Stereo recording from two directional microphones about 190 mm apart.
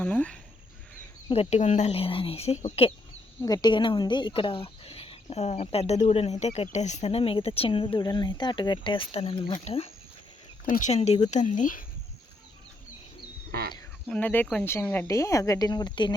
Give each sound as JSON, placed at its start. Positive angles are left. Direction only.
{"t": 0.0, "sound": "speech", "side_deg": 5}
{"t": 1.3, "sound": "speech", "side_deg": 35}
{"t": 3.4, "sound": "speech", "side_deg": 20}
{"t": 14.1, "sound": "speech", "side_deg": 10}